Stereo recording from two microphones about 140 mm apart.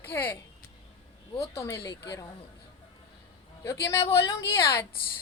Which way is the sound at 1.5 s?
20° left (ahead or behind).